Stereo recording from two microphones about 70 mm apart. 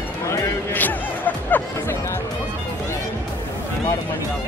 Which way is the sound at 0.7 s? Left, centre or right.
Left.